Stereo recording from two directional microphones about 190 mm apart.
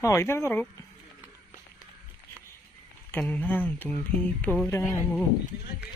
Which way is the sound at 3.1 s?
10° left (ahead or behind).